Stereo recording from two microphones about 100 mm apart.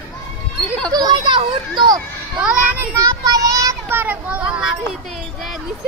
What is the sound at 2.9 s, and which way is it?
Child singing, 35° right (ahead or behind).